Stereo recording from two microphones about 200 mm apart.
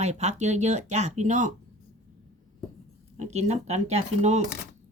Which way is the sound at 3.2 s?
35° right (ahead or behind).